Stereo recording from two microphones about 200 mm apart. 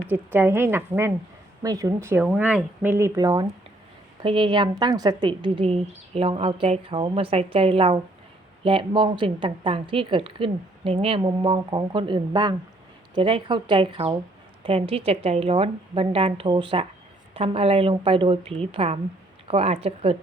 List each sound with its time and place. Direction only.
0.3 s a woman's voice: 10° right (ahead or behind); by 20.1 s 30° right (ahead or behind)